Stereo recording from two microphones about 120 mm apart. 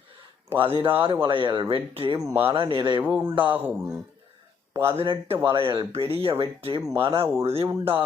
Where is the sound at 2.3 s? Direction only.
20° right (ahead or behind).